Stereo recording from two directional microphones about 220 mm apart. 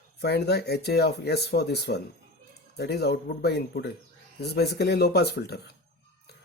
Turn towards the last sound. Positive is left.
turn(degrees=50)  # may be behind; listen again after turning